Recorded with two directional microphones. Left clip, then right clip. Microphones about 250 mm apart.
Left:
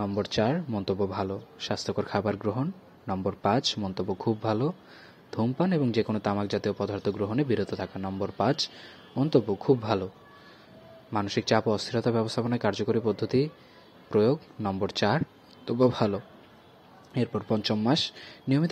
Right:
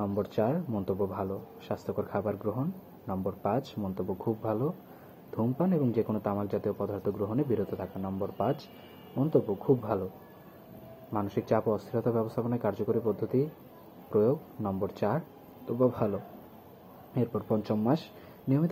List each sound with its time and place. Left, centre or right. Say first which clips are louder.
0.0 s speech: left 2 dB; left
11.1 s speech: left 3 dB; left